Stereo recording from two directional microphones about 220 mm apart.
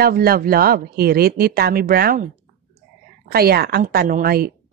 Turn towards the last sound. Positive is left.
turn(degrees=-45)  # may be behind; listen again after turning